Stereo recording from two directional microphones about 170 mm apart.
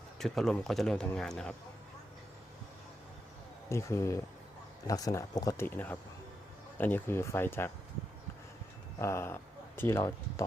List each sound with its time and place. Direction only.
0.2 s speech: centre (ahead or behind)
3.7 s speech: 15° left (ahead or behind)
9.0 s speech: 15° left (ahead or behind)